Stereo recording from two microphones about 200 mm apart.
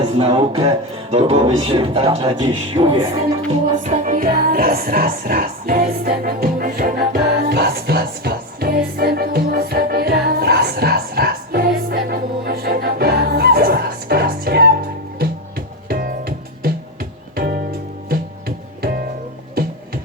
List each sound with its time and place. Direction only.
0.2 s speech: 30° right (ahead or behind)
3.8 s music: 40° right (ahead or behind)